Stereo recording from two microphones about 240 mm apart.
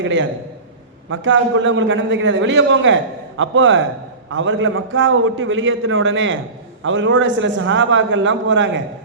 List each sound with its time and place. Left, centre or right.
0.0 s a man's voice: right